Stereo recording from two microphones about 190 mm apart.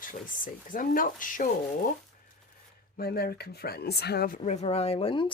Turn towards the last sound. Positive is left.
turn(degrees=25)  # may be behind; listen again after turning